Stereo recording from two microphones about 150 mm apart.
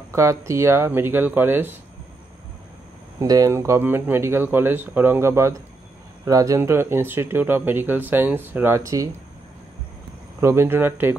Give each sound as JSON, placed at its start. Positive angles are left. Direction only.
{"t": 0.1, "sound": "speech", "side_deg": -20}
{"t": 3.2, "sound": "speech", "side_deg": -20}
{"t": 10.4, "sound": "speech", "side_deg": -15}